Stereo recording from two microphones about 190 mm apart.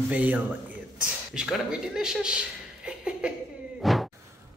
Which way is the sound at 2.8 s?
5° right (ahead or behind).